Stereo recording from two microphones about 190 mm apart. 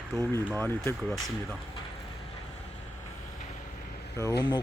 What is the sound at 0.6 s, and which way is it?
Speech, 10° left (ahead or behind).